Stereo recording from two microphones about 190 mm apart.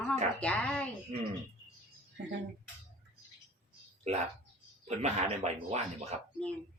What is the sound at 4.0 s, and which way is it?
Speech, 35° right (ahead or behind).